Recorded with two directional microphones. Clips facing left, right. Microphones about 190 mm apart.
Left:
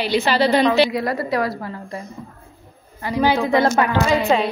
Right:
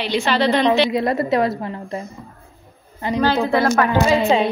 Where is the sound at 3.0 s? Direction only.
20° right (ahead or behind).